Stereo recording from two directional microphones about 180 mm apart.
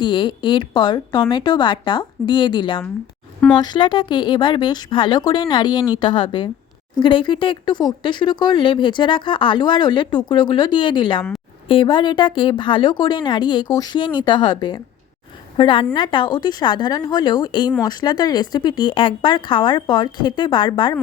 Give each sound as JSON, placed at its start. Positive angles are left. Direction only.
{"t": 0.0, "sound": "speech", "side_deg": 25}